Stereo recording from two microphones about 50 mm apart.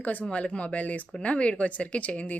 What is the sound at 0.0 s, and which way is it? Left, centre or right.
A woman's voice, left.